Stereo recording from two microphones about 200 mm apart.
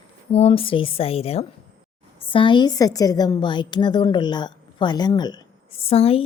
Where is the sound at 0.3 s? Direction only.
30° left (ahead or behind).